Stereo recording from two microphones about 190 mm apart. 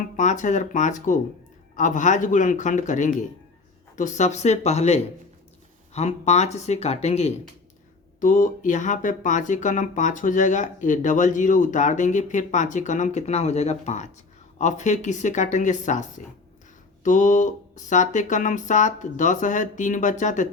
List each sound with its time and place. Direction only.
0.2 s speech: 40° left (ahead or behind)